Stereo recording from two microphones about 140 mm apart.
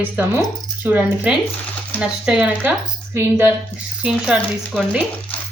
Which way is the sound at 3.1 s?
20° right (ahead or behind).